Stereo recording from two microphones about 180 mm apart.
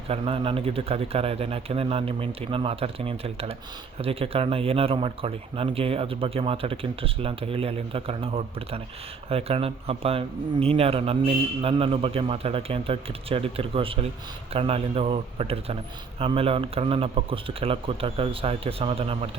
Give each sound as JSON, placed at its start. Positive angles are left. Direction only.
{"t": 0.1, "sound": "a man's voice", "side_deg": -30}